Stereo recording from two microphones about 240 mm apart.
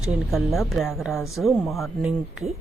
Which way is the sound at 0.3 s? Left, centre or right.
Centre.